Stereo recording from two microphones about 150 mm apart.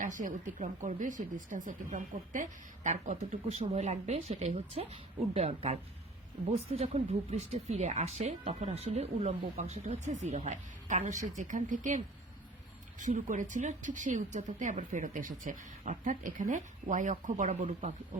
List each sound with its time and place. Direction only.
0.0 s speech: 60° right (ahead or behind)